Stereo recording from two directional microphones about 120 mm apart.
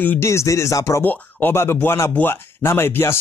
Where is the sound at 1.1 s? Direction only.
15° left (ahead or behind).